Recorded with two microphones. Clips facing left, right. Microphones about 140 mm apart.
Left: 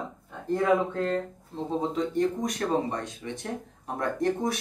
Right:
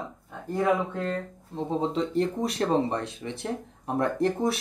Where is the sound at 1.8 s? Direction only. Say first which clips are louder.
Even; 30° right (ahead or behind).